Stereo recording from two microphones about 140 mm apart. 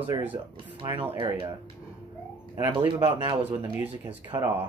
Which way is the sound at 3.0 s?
35° right (ahead or behind).